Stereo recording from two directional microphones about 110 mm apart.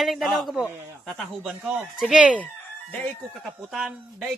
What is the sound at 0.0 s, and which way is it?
Speech, centre (ahead or behind).